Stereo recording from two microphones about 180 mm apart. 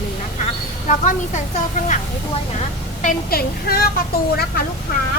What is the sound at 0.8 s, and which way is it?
Speech, 45° left (ahead or behind).